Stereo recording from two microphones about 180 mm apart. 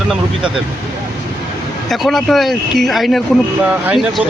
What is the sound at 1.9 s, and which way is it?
Speech, centre (ahead or behind).